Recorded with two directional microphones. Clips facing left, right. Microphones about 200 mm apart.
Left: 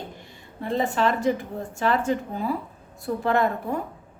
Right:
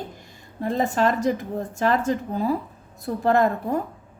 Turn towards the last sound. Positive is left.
turn(degrees=-40)  # may be behind; listen again after turning